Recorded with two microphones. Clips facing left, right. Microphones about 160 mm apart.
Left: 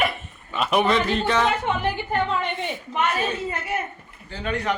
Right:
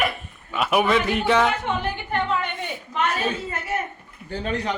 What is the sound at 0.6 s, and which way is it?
Speech, 5° right (ahead or behind).